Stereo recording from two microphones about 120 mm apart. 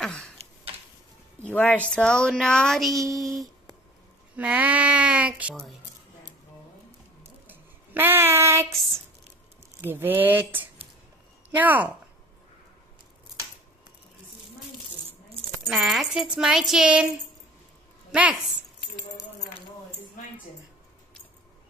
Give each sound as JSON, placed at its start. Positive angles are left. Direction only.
{"t": 0.0, "sound": "a sound", "side_deg": 5}
{"t": 1.4, "sound": "speech", "side_deg": 15}
{"t": 4.4, "sound": "speech", "side_deg": -10}
{"t": 7.4, "sound": "child singing", "side_deg": -15}
{"t": 9.8, "sound": "speech", "side_deg": -20}
{"t": 15.6, "sound": "speech", "side_deg": -5}